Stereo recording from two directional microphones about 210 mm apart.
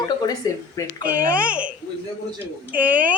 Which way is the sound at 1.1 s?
5° right (ahead or behind).